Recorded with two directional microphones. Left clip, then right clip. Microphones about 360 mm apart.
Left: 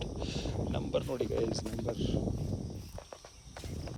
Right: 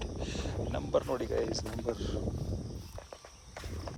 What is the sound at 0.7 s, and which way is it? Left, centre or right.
Speech, centre.